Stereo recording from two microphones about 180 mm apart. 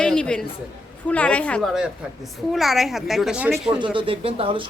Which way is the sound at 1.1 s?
5° left (ahead or behind).